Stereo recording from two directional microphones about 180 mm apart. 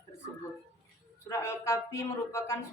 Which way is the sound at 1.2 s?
15° left (ahead or behind).